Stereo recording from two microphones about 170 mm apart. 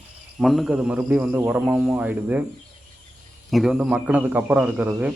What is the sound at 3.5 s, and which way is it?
A man's voice, centre (ahead or behind).